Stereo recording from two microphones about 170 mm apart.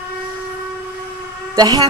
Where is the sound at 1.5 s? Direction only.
20° right (ahead or behind).